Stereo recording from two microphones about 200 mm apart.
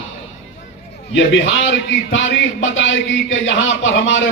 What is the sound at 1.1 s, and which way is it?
A man's voice, 65° left (ahead or behind).